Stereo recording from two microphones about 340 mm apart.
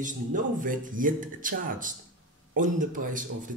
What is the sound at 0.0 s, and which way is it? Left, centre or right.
Speech, right.